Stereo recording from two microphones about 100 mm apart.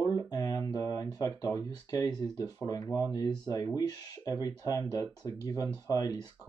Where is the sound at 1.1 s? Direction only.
35° left (ahead or behind).